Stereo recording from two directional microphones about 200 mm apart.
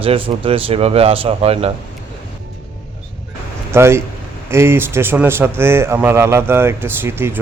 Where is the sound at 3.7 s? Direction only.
15° right (ahead or behind).